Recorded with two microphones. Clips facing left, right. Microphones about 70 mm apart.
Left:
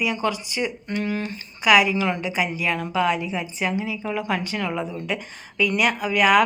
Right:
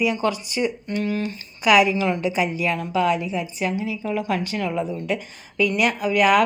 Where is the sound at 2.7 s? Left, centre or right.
Left.